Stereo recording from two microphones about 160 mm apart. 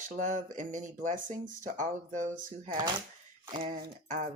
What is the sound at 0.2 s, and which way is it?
Speech, 50° right (ahead or behind).